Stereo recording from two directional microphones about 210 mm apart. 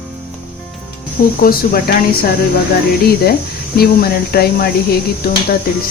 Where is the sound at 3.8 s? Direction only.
45° left (ahead or behind).